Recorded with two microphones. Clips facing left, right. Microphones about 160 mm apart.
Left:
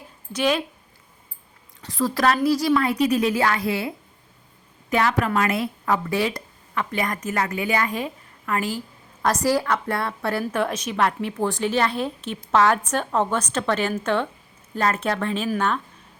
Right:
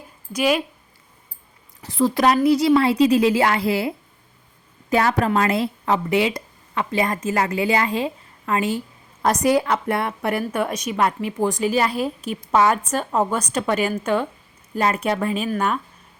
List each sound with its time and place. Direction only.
0.3 s a woman's voice: 5° right (ahead or behind)
1.8 s a woman's voice: 25° right (ahead or behind); by 15.8 s 5° right (ahead or behind)